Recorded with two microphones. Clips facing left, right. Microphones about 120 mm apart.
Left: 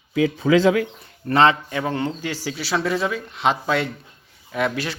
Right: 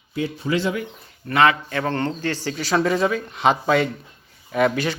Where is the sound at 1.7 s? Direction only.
10° left (ahead or behind).